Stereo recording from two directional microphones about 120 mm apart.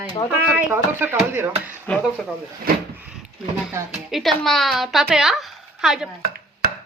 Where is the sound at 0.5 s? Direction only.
15° right (ahead or behind).